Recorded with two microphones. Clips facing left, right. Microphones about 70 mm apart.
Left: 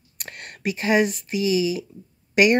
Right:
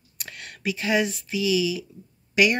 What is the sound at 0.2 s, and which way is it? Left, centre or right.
Speech, left.